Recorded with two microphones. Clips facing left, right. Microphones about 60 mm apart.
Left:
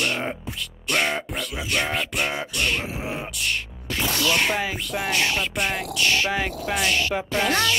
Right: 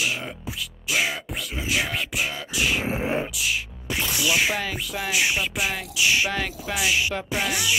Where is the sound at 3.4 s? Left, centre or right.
Centre.